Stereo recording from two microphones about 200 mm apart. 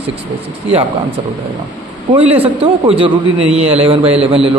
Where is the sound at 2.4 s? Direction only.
30° right (ahead or behind).